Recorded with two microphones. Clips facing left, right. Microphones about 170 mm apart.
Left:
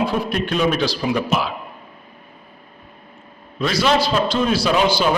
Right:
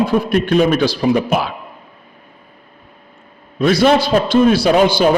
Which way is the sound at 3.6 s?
50° right (ahead or behind).